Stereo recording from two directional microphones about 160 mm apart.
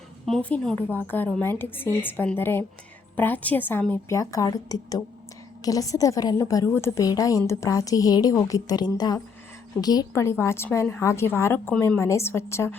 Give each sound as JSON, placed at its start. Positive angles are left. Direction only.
{"t": 0.3, "sound": "a woman's voice", "side_deg": 5}